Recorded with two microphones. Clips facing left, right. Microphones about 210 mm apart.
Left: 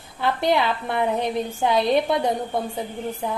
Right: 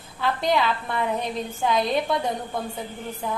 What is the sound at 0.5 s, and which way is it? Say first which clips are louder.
A woman's voice: left 2 dB; 20° left (ahead or behind).